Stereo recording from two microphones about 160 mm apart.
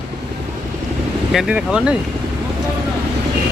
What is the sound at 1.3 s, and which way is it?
Speech, 5° right (ahead or behind).